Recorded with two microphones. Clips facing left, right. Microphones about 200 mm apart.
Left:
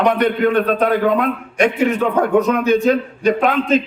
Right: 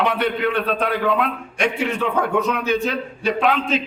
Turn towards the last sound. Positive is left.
turn(degrees=45)  # may be behind; listen again after turning